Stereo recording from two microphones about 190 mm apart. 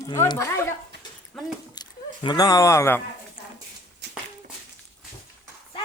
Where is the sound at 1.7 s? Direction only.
20° left (ahead or behind).